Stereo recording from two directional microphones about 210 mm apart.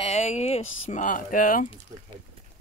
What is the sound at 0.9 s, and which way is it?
Speech, 40° left (ahead or behind).